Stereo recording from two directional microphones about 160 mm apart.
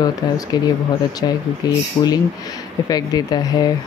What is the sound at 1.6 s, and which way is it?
Speech, 25° left (ahead or behind).